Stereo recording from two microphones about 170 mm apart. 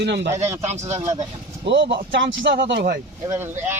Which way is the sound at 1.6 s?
90° right.